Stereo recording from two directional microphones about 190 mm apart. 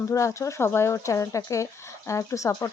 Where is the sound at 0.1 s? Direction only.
15° left (ahead or behind).